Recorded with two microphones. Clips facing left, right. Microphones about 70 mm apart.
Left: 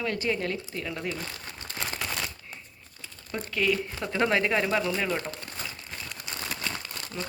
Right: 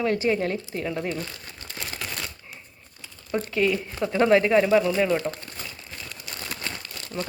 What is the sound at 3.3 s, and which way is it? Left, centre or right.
Speech, centre.